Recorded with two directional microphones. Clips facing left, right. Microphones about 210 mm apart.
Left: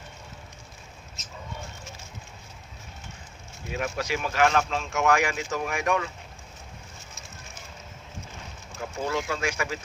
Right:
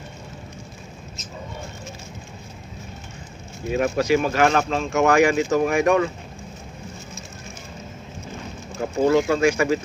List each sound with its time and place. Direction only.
3.7 s speech: 40° right (ahead or behind)
9.0 s speech: 40° right (ahead or behind)